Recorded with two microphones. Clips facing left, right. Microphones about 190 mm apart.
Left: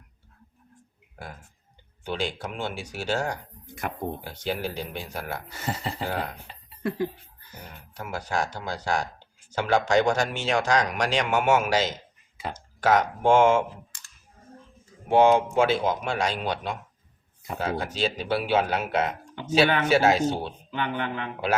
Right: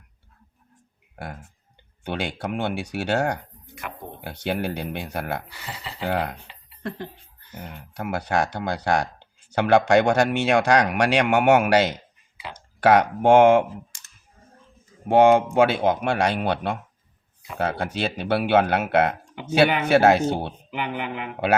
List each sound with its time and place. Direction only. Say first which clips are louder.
2.0 s speech: right 2 dB; 60° right (ahead or behind)
3.8 s speech: left 4 dB; 45° left (ahead or behind)
4.2 s speech: right 3 dB; 60° right (ahead or behind)
5.5 s speech: left 6 dB; 45° left (ahead or behind)
6.1 s speech: right 7 dB; 65° right (ahead or behind)
7.9 s speech: right 5 dB; 65° right (ahead or behind)
15.1 s speech: right 3 dB; 55° right (ahead or behind)
20.7 s speech: left 3 dB; 10° right (ahead or behind)